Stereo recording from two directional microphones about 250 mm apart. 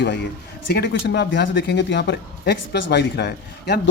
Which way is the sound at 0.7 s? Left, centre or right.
Left.